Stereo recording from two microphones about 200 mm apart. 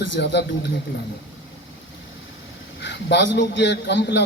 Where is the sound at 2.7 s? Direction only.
60° left (ahead or behind).